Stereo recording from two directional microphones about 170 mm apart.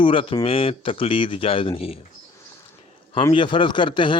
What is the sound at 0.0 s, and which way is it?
Speech, 30° left (ahead or behind).